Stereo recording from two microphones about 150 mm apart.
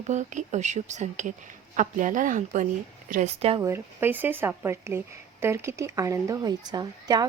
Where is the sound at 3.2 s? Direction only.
40° right (ahead or behind).